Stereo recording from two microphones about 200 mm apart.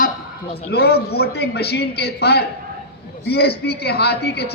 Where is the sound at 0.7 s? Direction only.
55° left (ahead or behind).